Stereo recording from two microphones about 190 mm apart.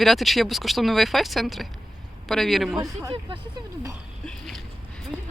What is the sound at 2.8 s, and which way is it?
Speech, 20° right (ahead or behind).